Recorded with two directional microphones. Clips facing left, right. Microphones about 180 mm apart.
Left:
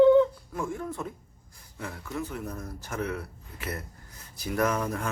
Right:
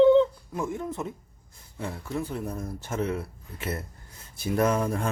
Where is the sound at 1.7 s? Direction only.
30° right (ahead or behind).